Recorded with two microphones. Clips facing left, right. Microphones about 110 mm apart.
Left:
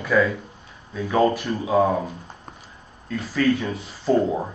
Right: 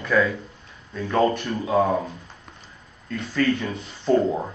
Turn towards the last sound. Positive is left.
turn(degrees=5)  # may be behind; listen again after turning